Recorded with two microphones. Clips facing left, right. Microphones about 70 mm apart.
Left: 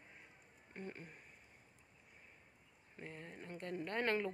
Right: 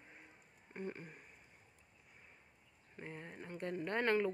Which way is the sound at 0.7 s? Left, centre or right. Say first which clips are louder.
Right 4 dB; centre.